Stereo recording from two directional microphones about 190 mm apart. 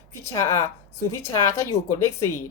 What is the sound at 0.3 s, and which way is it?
Speech, 15° left (ahead or behind).